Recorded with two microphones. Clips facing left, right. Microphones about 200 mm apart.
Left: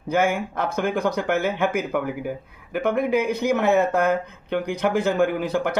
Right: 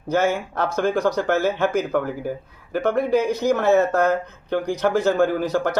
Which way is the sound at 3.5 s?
15° left (ahead or behind).